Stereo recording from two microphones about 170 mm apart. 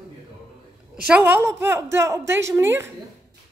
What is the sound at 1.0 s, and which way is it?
A woman's voice, 10° right (ahead or behind).